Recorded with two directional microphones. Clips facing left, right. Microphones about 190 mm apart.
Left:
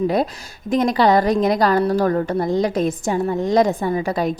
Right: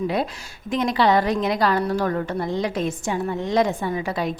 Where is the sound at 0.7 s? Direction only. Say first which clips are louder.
Left 4 dB; 40° left (ahead or behind).